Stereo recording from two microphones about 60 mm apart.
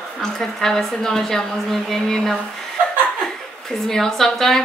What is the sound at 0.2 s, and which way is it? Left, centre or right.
A woman's voice, centre.